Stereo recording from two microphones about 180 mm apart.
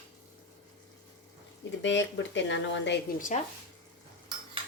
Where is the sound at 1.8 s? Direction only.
90° left.